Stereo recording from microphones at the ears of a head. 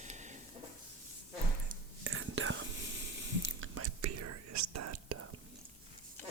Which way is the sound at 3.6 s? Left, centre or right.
Right.